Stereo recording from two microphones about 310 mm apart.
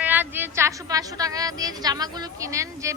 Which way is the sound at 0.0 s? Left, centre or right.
Centre.